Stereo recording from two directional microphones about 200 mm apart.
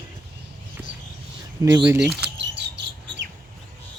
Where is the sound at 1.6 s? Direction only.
15° right (ahead or behind).